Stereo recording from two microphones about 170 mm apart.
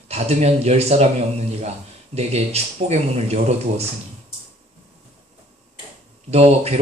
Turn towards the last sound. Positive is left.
turn(degrees=-35)  # may be behind; listen again after turning